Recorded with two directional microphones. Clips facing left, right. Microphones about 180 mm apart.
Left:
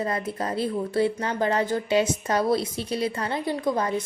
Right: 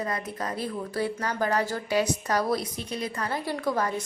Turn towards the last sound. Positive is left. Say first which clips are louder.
# left 2 dB
turn(degrees=20)  # may be behind; listen again after turning